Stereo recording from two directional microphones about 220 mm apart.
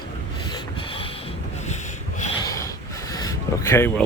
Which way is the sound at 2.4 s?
15° left (ahead or behind).